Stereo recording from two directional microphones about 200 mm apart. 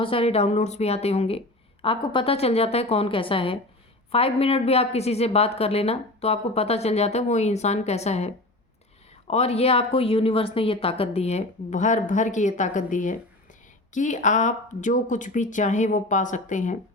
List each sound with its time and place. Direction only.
0.0 s a woman's voice: 30° left (ahead or behind)